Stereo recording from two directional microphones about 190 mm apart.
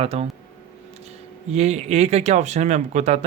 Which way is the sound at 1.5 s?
35° right (ahead or behind).